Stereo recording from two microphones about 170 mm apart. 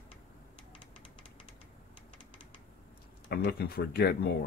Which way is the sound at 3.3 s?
65° left (ahead or behind).